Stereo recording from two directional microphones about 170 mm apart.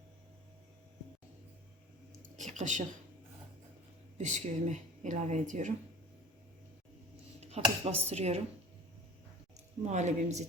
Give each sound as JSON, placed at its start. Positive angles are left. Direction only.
{"t": 2.3, "sound": "speech", "side_deg": -45}
{"t": 4.2, "sound": "speech", "side_deg": -45}
{"t": 7.4, "sound": "speech", "side_deg": -40}
{"t": 9.6, "sound": "speech", "side_deg": -45}